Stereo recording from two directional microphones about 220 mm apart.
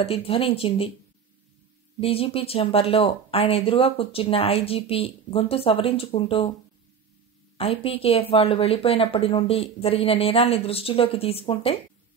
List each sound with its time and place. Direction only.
0.0 s speech: 25° left (ahead or behind)
2.0 s speech: 25° left (ahead or behind)
7.5 s speech: 25° left (ahead or behind)